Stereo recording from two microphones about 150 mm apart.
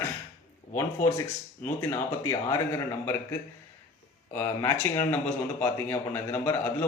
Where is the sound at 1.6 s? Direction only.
15° left (ahead or behind).